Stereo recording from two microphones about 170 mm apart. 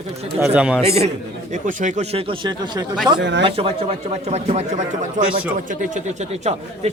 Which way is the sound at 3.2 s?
90° right.